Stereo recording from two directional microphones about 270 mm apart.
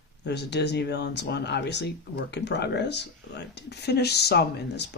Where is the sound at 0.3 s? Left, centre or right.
Left.